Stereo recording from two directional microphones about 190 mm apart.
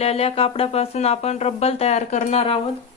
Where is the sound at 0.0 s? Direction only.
30° left (ahead or behind).